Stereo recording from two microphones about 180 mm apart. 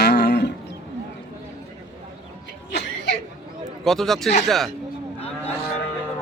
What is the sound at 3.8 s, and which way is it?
Speech, centre (ahead or behind).